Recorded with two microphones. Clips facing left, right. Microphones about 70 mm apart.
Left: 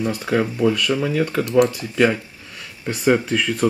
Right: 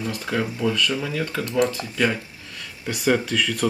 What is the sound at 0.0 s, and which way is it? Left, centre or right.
Speech, centre.